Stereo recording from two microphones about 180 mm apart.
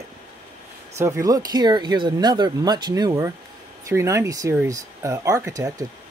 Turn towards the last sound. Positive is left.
turn(degrees=-20)  # may be behind; listen again after turning